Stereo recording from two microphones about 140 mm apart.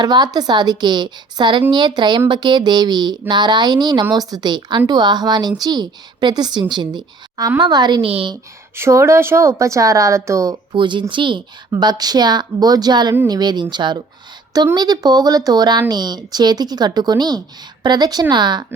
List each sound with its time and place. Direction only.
0.0 s speech: 30° right (ahead or behind)
8.7 s speech: 20° right (ahead or behind)